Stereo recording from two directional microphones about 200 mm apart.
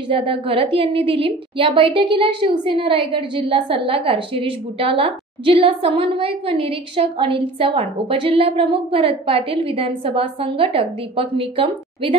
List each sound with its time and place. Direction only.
0.1 s a woman's voice: 25° right (ahead or behind)